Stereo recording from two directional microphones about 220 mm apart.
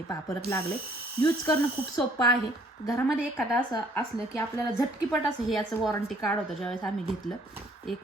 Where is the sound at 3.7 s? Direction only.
15° left (ahead or behind).